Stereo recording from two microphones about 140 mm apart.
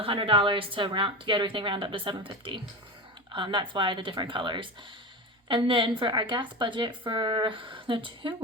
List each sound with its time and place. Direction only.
0.0 s a woman's voice: 40° right (ahead or behind)